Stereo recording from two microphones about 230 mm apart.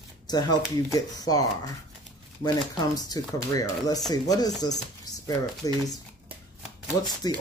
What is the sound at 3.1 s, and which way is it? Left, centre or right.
Speech, centre.